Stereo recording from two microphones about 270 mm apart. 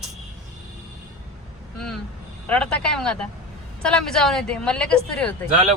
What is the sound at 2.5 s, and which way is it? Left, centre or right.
Speech, centre.